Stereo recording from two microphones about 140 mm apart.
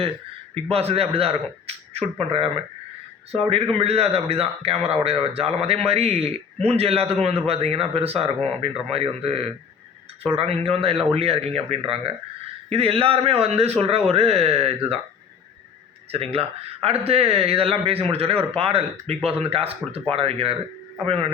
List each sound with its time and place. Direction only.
0.5 s speech: 45° right (ahead or behind)
3.5 s speech: 45° right (ahead or behind)
16.1 s speech: 45° right (ahead or behind)